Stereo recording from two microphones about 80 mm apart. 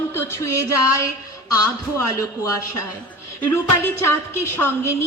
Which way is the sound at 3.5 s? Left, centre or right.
Left.